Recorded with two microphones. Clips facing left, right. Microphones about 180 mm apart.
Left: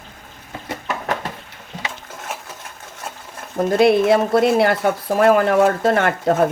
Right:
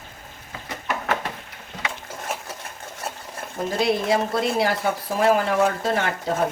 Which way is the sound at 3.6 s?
60° left (ahead or behind).